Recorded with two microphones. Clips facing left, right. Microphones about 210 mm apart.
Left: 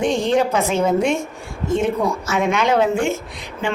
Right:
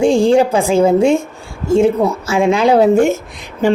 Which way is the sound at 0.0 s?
30° right (ahead or behind).